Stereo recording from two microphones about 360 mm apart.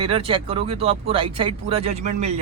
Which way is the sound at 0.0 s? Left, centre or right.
Centre.